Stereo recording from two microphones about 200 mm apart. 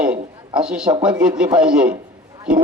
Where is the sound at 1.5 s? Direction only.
5° right (ahead or behind).